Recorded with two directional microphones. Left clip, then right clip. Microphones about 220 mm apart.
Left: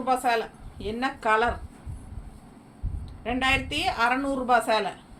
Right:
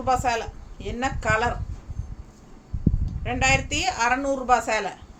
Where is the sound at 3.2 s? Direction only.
20° right (ahead or behind).